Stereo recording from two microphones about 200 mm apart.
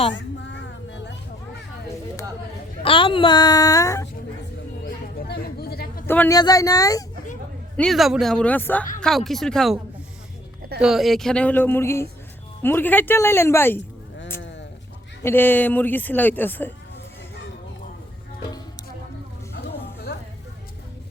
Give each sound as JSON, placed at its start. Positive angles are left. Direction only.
{"t": 0.1, "sound": "a sound", "side_deg": 65}
{"t": 2.8, "sound": "a child's voice", "side_deg": 25}
{"t": 5.3, "sound": "a sound", "side_deg": 50}
{"t": 6.1, "sound": "speech", "side_deg": 15}
{"t": 7.8, "sound": "speech", "side_deg": 0}
{"t": 15.2, "sound": "speech", "side_deg": 10}